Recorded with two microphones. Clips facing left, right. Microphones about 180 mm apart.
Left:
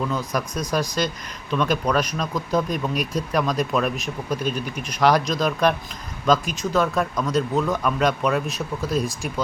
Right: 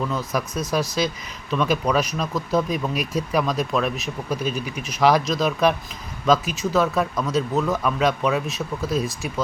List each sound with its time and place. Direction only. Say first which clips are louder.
0.0 s speech: even; centre (ahead or behind)